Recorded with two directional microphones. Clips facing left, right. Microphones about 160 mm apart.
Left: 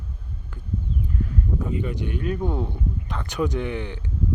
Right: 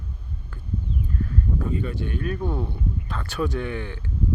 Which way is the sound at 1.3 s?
20° left (ahead or behind).